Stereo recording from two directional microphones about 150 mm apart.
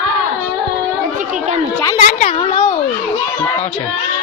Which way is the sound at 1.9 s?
55° left (ahead or behind).